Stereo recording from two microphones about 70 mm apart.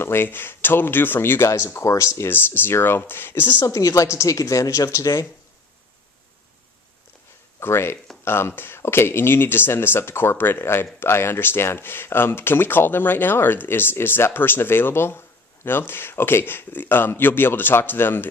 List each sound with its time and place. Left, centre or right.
0.0 s speech: left
2.3 s speech: left
3.6 s a woman's voice: left
7.6 s speech: left